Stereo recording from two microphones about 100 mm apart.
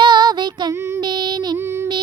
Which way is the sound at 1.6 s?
25° right (ahead or behind).